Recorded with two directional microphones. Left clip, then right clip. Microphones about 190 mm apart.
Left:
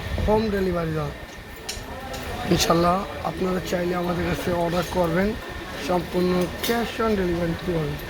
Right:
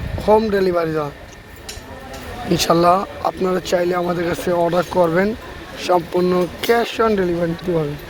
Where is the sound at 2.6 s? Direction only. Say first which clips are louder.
Right 7 dB; 35° right (ahead or behind).